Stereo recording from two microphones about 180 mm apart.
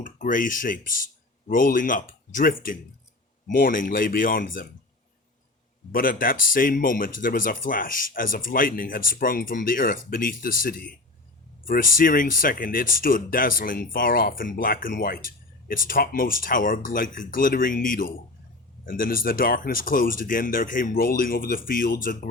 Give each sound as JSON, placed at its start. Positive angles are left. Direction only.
{"t": 0.0, "sound": "speech", "side_deg": 45}
{"t": 5.9, "sound": "speech", "side_deg": 50}